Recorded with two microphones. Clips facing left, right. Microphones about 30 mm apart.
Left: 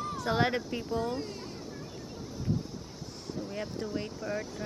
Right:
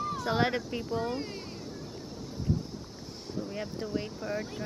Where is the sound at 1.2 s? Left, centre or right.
Right.